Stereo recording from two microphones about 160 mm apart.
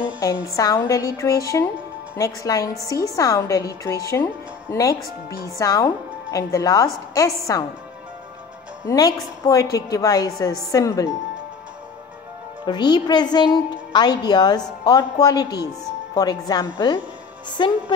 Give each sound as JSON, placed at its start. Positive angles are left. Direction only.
{"t": 0.2, "sound": "a woman's voice", "side_deg": 20}
{"t": 8.8, "sound": "a woman's voice", "side_deg": 20}
{"t": 12.6, "sound": "a woman's voice", "side_deg": 25}